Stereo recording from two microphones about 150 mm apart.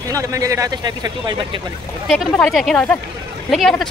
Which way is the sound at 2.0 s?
Centre (ahead or behind).